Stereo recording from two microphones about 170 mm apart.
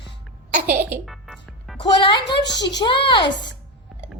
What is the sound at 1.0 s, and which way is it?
Music, centre (ahead or behind).